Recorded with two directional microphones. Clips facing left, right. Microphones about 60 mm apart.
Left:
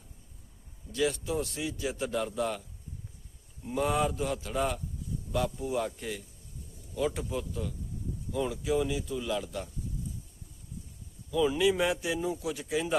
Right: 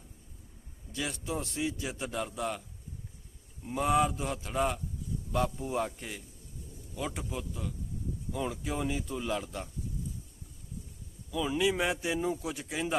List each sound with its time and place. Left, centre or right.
0.9 s a man's voice: centre
2.0 s speech: centre
3.7 s speech: centre
5.6 s a man's voice: right
6.0 s speech: centre
8.4 s speech: right
11.3 s speech: centre
11.6 s a man's voice: right